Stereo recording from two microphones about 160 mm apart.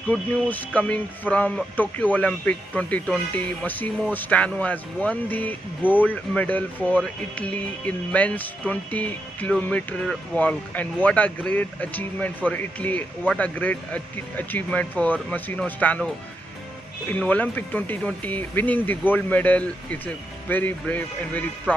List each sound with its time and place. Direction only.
0.1 s speech: 10° left (ahead or behind)
17.1 s speech: 10° left (ahead or behind)